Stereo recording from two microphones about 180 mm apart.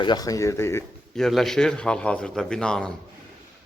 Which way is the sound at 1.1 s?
Centre (ahead or behind).